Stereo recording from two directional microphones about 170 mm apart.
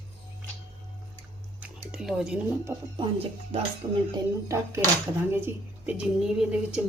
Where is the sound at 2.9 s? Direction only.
35° right (ahead or behind).